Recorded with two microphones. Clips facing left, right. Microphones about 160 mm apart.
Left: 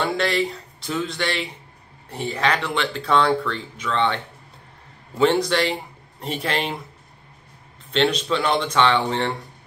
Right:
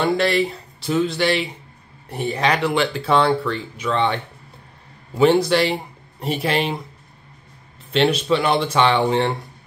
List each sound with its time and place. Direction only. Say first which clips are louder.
0.0 s speech: right 4 dB; 5° right (ahead or behind)
7.9 s speech: right 3 dB; 5° right (ahead or behind)